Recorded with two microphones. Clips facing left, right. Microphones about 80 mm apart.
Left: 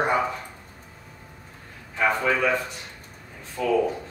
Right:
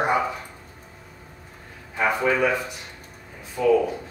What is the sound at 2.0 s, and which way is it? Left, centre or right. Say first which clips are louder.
Speech: right 1 dB; centre.